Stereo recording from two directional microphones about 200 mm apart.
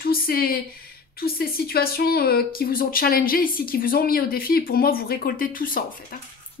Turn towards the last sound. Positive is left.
turn(degrees=45)  # may be behind; listen again after turning